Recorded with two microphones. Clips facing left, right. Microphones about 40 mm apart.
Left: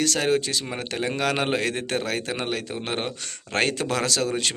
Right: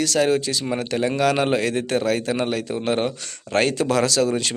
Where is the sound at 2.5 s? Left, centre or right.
Left.